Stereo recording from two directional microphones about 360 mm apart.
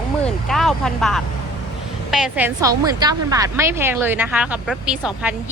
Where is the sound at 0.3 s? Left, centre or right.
Centre.